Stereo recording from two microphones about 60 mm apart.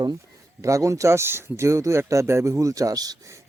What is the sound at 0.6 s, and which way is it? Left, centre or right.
Speech, right.